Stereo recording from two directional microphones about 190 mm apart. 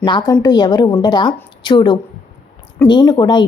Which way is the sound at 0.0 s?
25° left (ahead or behind).